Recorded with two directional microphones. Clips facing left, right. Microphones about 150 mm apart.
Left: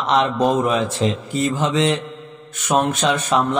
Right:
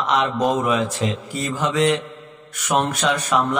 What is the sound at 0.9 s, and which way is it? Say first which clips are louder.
A man's voice: left 3 dB; 25° left (ahead or behind).